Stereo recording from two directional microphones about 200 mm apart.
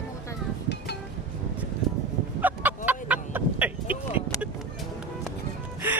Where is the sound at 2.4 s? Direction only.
10° right (ahead or behind).